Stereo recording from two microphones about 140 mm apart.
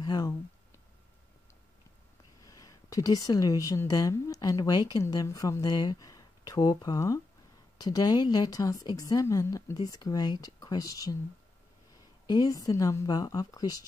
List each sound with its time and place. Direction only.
0.0 s a sound: 30° left (ahead or behind)
2.4 s a woman's voice: 25° left (ahead or behind)
12.3 s a woman's voice: 25° left (ahead or behind)